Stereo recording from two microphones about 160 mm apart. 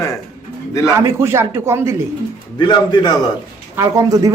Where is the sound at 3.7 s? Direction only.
20° right (ahead or behind).